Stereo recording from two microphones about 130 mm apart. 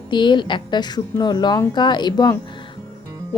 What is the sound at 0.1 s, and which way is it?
Speech, 35° left (ahead or behind).